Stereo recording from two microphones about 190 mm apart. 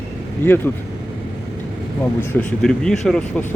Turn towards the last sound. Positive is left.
turn(degrees=5)  # may be behind; listen again after turning